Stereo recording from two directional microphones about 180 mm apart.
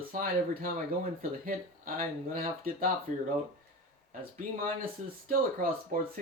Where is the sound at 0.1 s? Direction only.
50° right (ahead or behind).